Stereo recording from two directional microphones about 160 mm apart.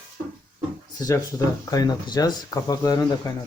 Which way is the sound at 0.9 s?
20° left (ahead or behind).